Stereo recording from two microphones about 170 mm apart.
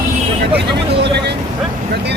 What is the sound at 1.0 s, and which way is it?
Speech, 85° right.